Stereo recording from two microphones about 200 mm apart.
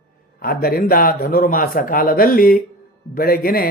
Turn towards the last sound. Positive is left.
turn(degrees=50)  # may be behind; listen again after turning